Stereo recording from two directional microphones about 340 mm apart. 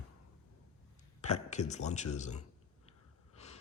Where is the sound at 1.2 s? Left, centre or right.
Centre.